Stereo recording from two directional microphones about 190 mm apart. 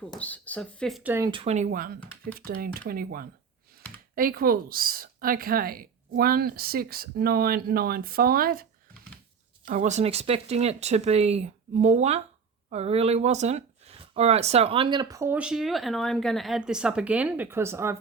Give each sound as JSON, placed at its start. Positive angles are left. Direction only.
{"t": 0.2, "sound": "speech", "side_deg": 10}
{"t": 1.1, "sound": "a woman's voice", "side_deg": -20}
{"t": 9.6, "sound": "speech", "side_deg": -40}